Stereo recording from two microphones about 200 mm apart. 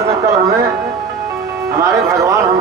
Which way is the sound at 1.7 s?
15° right (ahead or behind).